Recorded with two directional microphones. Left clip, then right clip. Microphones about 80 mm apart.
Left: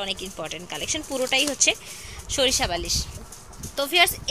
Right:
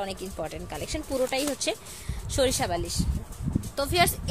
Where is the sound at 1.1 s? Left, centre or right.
Centre.